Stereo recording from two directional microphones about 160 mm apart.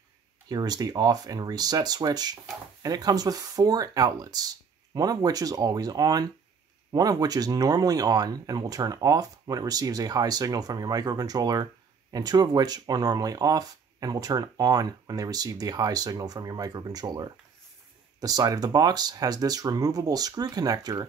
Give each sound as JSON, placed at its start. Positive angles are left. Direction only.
{"t": 0.5, "sound": "speech", "side_deg": -25}